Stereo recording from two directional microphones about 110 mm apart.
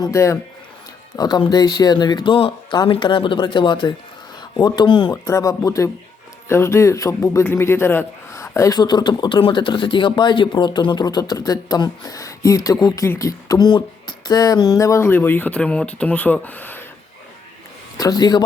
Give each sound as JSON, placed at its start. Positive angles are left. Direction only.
{"t": 0.0, "sound": "a man's voice", "side_deg": 25}
{"t": 17.9, "sound": "a man's voice", "side_deg": 35}